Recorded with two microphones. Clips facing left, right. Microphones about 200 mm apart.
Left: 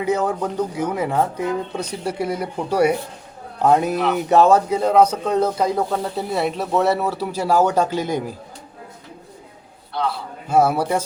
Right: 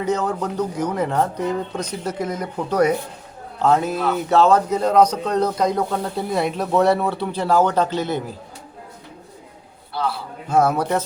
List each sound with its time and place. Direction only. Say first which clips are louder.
0.0 s a man's voice: left 1 dB; 10° left (ahead or behind)
9.9 s a sound: left 1 dB; 5° right (ahead or behind)
10.5 s a man's voice: left 1 dB; 10° left (ahead or behind)